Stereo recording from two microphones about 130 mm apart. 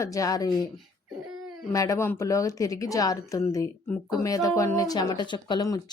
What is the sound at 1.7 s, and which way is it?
A woman's voice, 25° left (ahead or behind).